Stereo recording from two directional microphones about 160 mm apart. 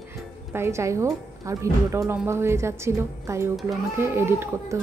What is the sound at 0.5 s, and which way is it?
A woman's voice, 15° right (ahead or behind).